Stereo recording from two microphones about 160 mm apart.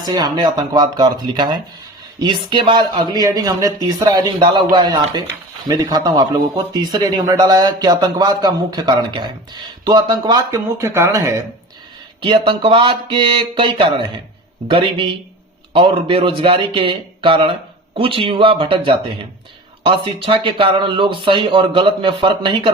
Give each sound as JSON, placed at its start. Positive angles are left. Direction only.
{"t": 0.0, "sound": "speech", "side_deg": -25}
{"t": 12.2, "sound": "speech", "side_deg": -30}